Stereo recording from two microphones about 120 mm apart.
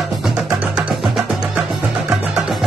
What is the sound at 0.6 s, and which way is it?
Music, 10° right (ahead or behind).